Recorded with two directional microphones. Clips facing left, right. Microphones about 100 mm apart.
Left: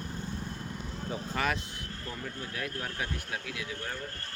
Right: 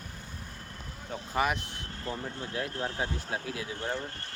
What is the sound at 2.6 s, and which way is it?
Speech, 25° right (ahead or behind).